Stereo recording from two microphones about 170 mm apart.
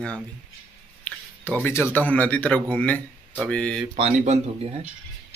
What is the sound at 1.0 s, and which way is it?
A man's voice, 10° left (ahead or behind).